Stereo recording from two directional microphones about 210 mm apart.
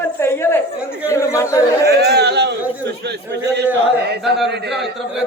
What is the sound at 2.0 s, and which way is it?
A man's voice, 50° right (ahead or behind).